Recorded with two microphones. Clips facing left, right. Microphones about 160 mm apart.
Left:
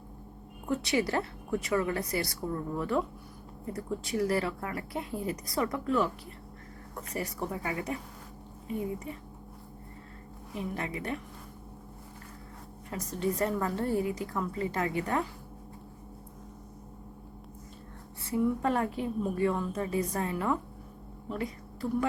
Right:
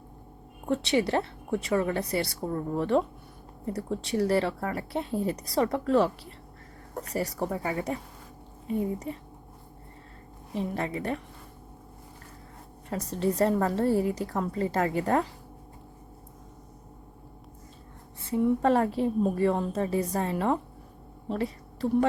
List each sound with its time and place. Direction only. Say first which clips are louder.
0.6 s speech: right 3 dB; 30° right (ahead or behind)
10.5 s speech: right 5 dB; 35° right (ahead or behind)
12.9 s speech: right 4 dB; 35° right (ahead or behind)
18.3 s speech: right 5 dB; 25° right (ahead or behind)
21.2 s a sound: right 5 dB; 30° right (ahead or behind)